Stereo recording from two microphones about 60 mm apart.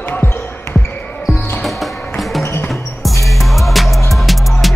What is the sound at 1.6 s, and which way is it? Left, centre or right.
Music, centre.